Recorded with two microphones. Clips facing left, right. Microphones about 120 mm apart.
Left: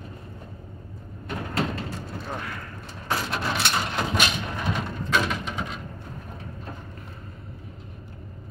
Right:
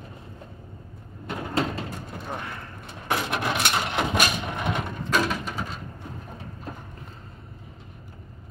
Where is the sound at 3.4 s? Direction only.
15° right (ahead or behind).